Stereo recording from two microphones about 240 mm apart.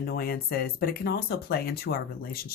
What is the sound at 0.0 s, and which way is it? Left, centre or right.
Speech, left.